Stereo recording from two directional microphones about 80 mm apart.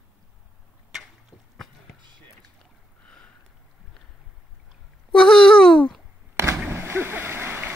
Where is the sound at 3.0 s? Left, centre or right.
Centre.